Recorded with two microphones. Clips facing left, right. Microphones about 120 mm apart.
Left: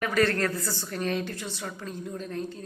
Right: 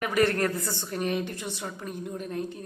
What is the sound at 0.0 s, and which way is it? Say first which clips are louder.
Speech: right 1 dB; 15° right (ahead or behind).